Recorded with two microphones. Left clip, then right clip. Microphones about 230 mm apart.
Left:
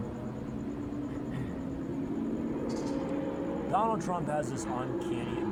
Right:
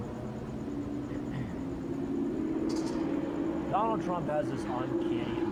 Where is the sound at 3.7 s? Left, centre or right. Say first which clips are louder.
Left 1 dB; left.